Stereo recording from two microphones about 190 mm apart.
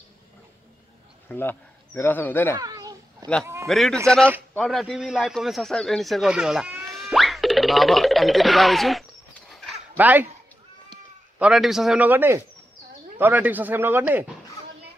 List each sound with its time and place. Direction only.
1.3 s speech: 10° left (ahead or behind)
2.5 s children playing: 20° right (ahead or behind)
3.6 s a man's voice: centre (ahead or behind)
11.3 s speech: 5° right (ahead or behind)